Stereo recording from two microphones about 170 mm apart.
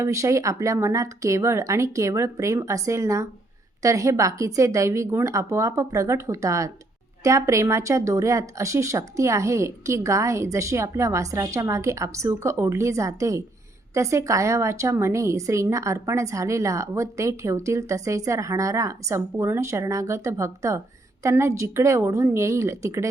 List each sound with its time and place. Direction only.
0.0 s a woman's voice: 15° right (ahead or behind)